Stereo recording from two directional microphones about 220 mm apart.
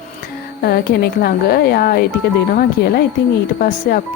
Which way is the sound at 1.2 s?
45° left (ahead or behind).